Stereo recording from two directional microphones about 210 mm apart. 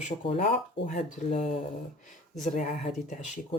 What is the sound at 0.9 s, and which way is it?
Speech, 35° left (ahead or behind).